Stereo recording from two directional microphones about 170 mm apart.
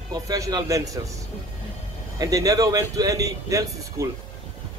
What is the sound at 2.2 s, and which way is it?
Speech, 20° right (ahead or behind).